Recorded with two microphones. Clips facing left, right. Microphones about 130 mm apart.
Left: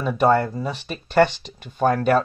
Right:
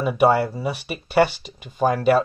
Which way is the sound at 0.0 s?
10° right (ahead or behind).